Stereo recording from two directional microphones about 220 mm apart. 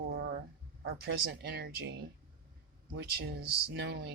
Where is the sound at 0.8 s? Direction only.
45° right (ahead or behind).